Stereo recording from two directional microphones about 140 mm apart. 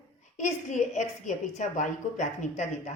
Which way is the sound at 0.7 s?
60° left (ahead or behind).